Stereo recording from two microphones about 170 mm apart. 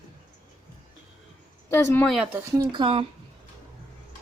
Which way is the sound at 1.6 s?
15° left (ahead or behind).